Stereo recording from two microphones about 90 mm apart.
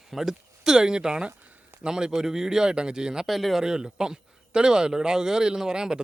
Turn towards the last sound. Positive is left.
turn(degrees=-10)  # may be behind; listen again after turning